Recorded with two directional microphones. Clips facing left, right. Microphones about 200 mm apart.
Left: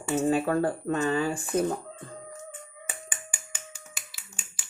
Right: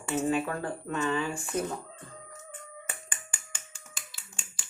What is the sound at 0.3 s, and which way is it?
Speech, 35° left (ahead or behind).